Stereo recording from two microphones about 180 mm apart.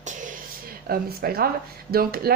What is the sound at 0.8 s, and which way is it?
A woman's voice, 60° right (ahead or behind).